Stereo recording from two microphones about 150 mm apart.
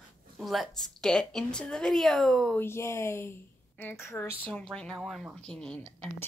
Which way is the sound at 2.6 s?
15° left (ahead or behind).